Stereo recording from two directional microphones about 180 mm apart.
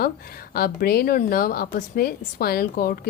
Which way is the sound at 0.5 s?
55° left (ahead or behind).